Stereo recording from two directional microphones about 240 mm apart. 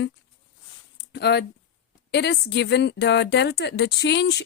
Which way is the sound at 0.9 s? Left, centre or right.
Left.